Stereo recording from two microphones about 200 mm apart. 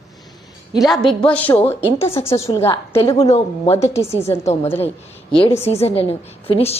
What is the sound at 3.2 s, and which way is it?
Speech, 30° left (ahead or behind).